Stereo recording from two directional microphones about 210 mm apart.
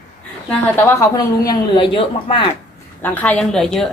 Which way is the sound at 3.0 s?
5° left (ahead or behind).